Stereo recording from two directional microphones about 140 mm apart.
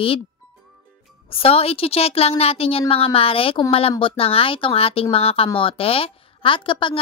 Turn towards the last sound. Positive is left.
turn(degrees=40)  # may be behind; listen again after turning